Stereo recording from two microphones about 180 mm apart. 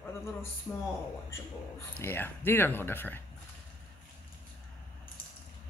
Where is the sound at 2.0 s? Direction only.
10° left (ahead or behind).